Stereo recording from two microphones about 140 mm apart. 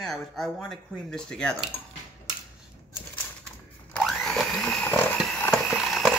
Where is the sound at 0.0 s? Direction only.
5° left (ahead or behind).